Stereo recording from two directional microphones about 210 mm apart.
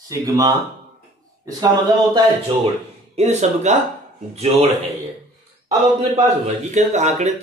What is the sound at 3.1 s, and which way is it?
Speech, 30° right (ahead or behind).